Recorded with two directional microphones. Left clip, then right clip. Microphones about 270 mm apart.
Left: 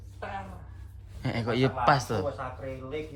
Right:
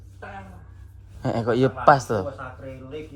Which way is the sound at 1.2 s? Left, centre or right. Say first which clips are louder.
Right 6 dB; centre.